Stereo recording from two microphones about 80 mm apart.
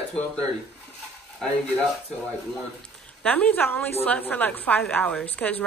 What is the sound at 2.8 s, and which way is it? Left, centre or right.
A woman's voice, centre.